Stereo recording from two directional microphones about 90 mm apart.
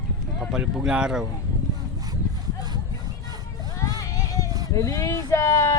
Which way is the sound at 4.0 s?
35° left (ahead or behind).